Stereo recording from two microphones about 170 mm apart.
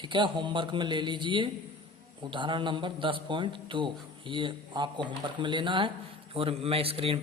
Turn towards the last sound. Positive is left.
turn(degrees=-35)  # may be behind; listen again after turning